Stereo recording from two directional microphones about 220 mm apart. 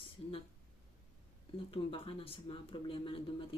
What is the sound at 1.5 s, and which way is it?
Speech, 25° left (ahead or behind).